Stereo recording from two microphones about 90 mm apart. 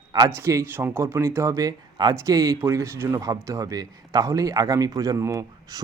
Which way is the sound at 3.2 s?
40° right (ahead or behind).